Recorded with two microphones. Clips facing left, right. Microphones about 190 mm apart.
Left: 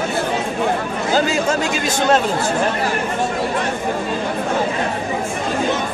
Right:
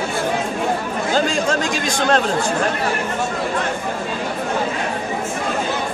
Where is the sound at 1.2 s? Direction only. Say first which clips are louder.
Left 1 dB; 5° left (ahead or behind).